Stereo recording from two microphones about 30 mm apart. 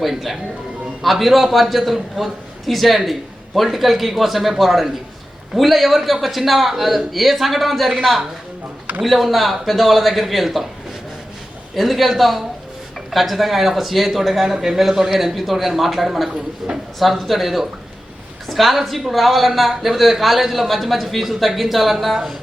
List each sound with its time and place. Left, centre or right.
0.0 s a man's voice: centre
9.0 s a man's voice: centre
11.7 s a man's voice: centre
14.5 s a man's voice: centre
16.6 s speech: centre
17.0 s a man's voice: centre